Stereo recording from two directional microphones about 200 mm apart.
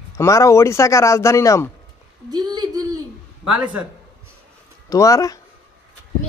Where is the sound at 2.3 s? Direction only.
20° right (ahead or behind).